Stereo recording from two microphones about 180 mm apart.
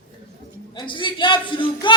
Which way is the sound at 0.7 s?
25° left (ahead or behind).